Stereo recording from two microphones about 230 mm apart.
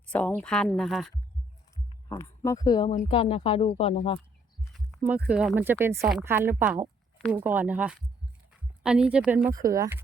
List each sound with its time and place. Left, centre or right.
0.1 s speech: centre
2.0 s speech: centre
4.7 s speech: centre